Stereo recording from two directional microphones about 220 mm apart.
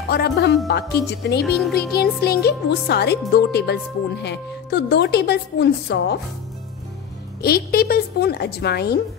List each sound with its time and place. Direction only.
0.1 s speech: 50° left (ahead or behind)
7.4 s speech: 45° left (ahead or behind)